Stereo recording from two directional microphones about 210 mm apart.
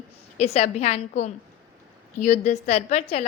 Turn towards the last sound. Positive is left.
turn(degrees=30)  # may be behind; listen again after turning